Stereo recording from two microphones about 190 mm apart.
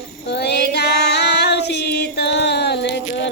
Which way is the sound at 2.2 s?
65° left (ahead or behind).